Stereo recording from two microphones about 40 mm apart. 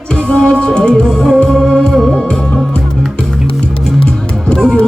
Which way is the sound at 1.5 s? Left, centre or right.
Centre.